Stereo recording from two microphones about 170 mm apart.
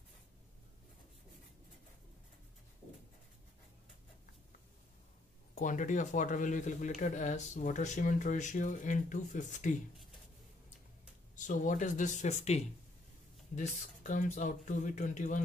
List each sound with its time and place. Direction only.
5.5 s speech: 45° left (ahead or behind)
11.3 s speech: 50° left (ahead or behind)